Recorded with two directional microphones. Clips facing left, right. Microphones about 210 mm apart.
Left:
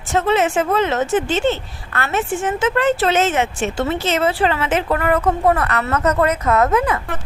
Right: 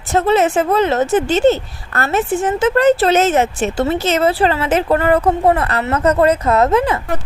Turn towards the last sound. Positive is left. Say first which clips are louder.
# right 3 dB
turn(degrees=-30)  # may be behind; listen again after turning